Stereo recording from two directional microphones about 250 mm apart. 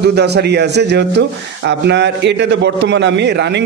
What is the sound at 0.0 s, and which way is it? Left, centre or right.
A man's voice, right.